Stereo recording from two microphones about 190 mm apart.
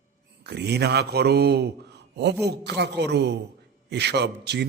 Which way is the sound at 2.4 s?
60° right (ahead or behind).